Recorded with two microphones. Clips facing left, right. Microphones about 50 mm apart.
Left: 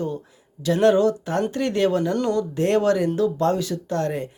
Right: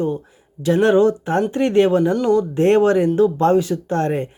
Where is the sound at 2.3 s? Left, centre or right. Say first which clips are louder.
Right 6 dB; right.